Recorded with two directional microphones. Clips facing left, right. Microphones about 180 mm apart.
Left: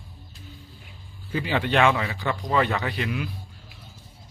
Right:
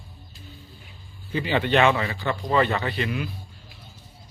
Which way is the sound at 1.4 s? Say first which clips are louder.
Right 1 dB; 5° left (ahead or behind).